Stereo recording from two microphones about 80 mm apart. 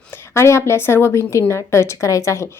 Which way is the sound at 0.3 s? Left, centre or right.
Left.